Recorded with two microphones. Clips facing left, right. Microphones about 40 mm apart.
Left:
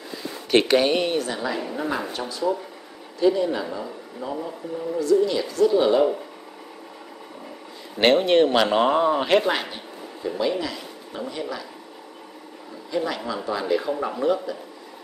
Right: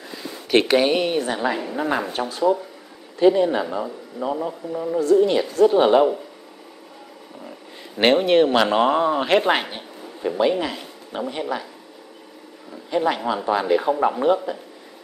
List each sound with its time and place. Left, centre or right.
0.5 s speech: centre
1.2 s a woman's voice: right
2.1 s a woman's voice: right
8.0 s speech: centre
9.5 s speech: right
12.9 s a woman's voice: right